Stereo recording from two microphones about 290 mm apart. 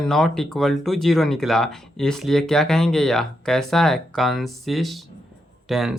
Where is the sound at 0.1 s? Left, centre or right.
Centre.